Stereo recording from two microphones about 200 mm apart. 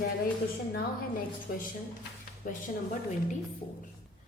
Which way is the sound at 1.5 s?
45° left (ahead or behind).